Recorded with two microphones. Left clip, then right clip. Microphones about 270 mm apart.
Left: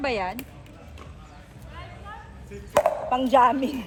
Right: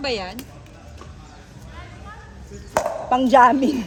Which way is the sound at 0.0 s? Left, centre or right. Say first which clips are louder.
Right 1 dB; left.